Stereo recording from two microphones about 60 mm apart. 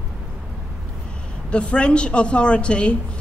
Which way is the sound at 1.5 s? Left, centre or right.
Centre.